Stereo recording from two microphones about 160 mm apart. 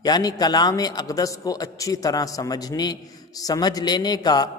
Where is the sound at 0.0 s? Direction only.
25° left (ahead or behind).